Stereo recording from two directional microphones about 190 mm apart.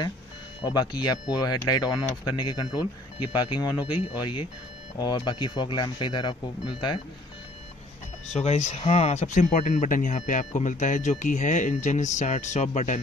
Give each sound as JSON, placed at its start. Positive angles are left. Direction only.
{"t": 0.6, "sound": "speech", "side_deg": 20}
{"t": 8.3, "sound": "speech", "side_deg": 35}